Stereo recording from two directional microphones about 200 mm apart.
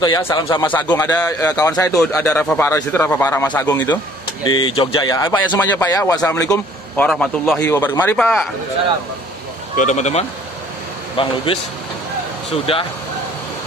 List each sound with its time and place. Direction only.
0.0 s a man's voice: 20° left (ahead or behind)
2.0 s a man's voice: 5° left (ahead or behind)
9.8 s speech: 35° left (ahead or behind)
12.7 s speech: 30° left (ahead or behind)